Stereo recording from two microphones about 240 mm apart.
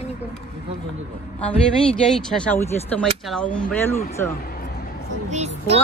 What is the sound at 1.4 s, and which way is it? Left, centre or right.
Speech, centre.